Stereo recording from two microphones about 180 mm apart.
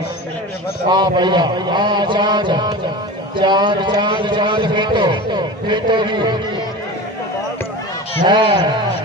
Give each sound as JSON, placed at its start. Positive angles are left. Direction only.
{"t": 0.8, "sound": "a man's voice", "side_deg": -25}
{"t": 8.2, "sound": "a man's voice", "side_deg": -25}